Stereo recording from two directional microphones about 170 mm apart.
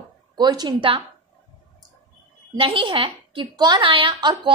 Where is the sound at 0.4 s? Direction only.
25° right (ahead or behind).